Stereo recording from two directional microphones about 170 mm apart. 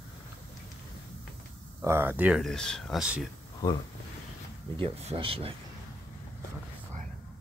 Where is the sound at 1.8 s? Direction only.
15° right (ahead or behind).